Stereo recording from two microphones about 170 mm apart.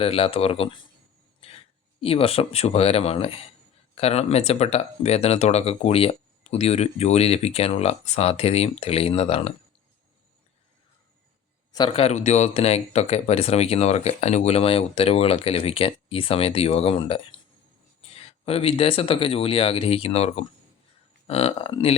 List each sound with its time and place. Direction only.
0.0 s speech: 35° left (ahead or behind)
1.4 s a sound: 35° left (ahead or behind)
2.0 s speech: 35° left (ahead or behind)
11.7 s speech: 30° left (ahead or behind)